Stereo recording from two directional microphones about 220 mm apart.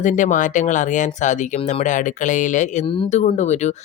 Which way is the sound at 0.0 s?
35° left (ahead or behind).